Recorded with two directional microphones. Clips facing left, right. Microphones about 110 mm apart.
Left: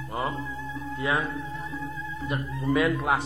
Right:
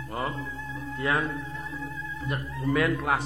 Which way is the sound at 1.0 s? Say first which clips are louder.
Even; 10° left (ahead or behind).